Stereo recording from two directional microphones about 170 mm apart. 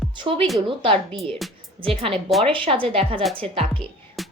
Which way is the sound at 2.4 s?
30° right (ahead or behind).